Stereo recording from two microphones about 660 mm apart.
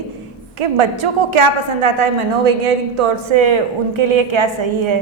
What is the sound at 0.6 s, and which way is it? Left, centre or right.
A woman's voice, right.